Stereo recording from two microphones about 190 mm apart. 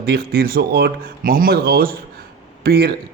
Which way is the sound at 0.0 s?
55° right (ahead or behind).